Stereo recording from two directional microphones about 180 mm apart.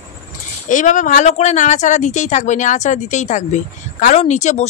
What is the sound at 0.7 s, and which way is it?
Speech, 45° left (ahead or behind).